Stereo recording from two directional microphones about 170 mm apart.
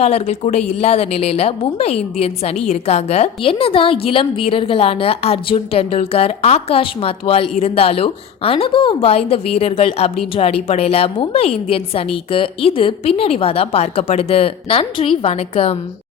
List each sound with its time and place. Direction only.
0.0 s a woman's voice: 40° left (ahead or behind)